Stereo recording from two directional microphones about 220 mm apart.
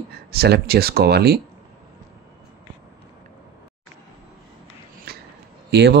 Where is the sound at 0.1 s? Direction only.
45° right (ahead or behind).